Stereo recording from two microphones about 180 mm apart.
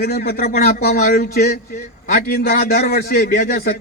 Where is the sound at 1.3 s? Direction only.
60° left (ahead or behind).